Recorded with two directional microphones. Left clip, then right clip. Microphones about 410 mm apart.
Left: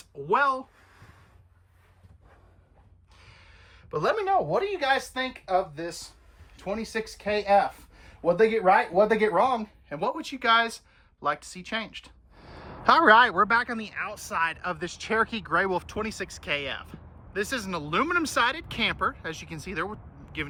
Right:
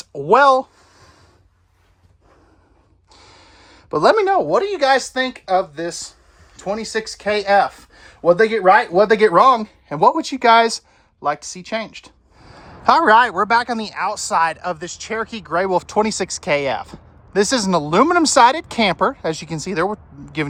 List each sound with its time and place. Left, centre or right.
0.3 s speech: centre
3.1 s speech: centre